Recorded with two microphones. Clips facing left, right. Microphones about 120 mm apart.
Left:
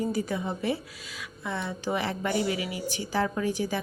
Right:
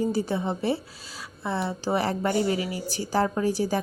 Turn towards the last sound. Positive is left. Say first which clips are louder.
# right 4 dB
turn(degrees=-35)  # may be behind; listen again after turning